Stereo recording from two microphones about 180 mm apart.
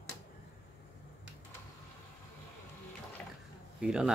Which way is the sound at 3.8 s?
5° right (ahead or behind).